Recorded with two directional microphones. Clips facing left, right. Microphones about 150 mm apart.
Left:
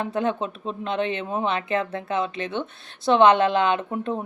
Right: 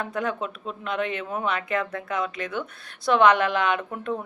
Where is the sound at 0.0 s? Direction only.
25° left (ahead or behind).